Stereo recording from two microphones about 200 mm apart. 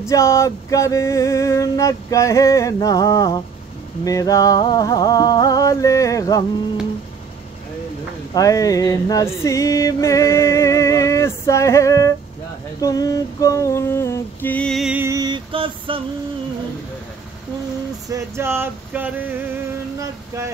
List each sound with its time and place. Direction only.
0.0 s music: 15° left (ahead or behind)
8.4 s music: 15° left (ahead or behind); by 16.0 s 25° right (ahead or behind)
18.0 s a sound: 15° right (ahead or behind)